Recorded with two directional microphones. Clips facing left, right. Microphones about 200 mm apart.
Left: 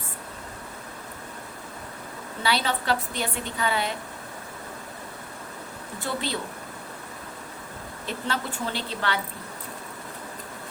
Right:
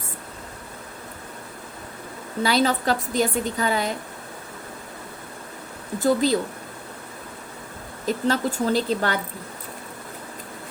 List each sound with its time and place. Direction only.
2.4 s a woman's voice: 40° right (ahead or behind)
6.0 s a woman's voice: 40° right (ahead or behind)
8.0 s a woman's voice: 40° right (ahead or behind)